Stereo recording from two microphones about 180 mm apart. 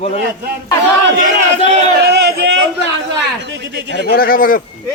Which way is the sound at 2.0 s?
65° right (ahead or behind).